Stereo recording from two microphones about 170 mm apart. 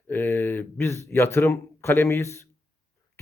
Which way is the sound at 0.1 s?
10° left (ahead or behind).